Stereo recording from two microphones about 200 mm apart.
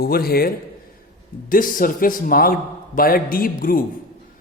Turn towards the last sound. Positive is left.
turn(degrees=45)  # may be behind; listen again after turning